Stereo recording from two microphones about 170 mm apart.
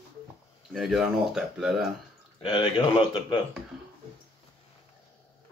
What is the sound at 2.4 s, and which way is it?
Speech, 25° left (ahead or behind).